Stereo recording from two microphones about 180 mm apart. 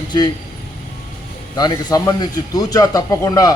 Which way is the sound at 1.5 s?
20° left (ahead or behind).